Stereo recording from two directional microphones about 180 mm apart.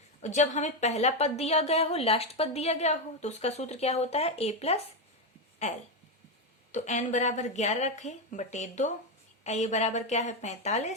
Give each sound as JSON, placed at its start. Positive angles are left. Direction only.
{"t": 0.2, "sound": "a woman's voice", "side_deg": 40}